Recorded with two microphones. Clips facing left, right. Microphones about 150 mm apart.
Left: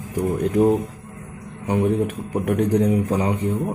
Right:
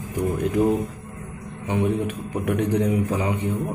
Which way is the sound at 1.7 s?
40° left (ahead or behind).